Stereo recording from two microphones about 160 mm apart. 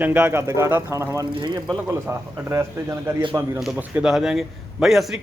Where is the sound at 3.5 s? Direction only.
5° right (ahead or behind).